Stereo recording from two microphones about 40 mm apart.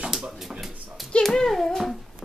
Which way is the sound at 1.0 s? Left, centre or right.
Centre.